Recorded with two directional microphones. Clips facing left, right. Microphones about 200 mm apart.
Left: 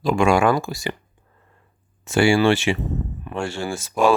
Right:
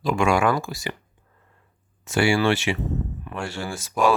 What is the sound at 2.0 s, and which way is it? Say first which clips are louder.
Speech: left 4 dB; 30° left (ahead or behind).